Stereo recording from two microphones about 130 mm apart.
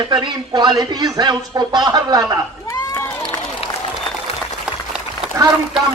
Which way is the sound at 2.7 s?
25° left (ahead or behind).